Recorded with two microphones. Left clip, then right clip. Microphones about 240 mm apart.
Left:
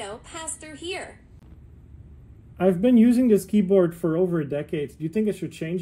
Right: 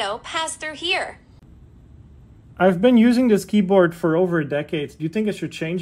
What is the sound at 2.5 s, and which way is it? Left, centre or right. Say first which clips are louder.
Speech: right 4 dB; right.